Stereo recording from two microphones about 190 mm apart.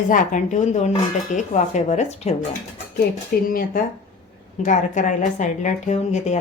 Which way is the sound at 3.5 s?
50° left (ahead or behind).